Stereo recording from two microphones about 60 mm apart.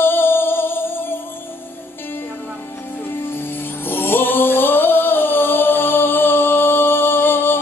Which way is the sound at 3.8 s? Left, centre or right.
Left.